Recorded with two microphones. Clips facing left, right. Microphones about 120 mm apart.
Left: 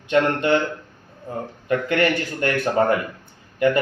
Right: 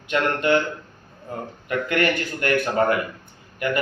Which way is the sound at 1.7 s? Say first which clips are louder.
Left 2 dB; 25° left (ahead or behind).